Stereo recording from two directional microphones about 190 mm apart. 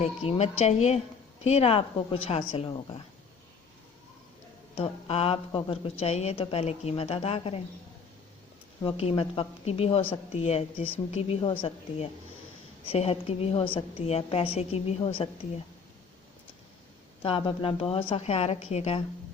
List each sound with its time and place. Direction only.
0.0 s a woman's voice: 30° left (ahead or behind)
4.8 s a woman's voice: 30° left (ahead or behind)
8.8 s a woman's voice: 30° left (ahead or behind)
17.2 s a woman's voice: 30° left (ahead or behind)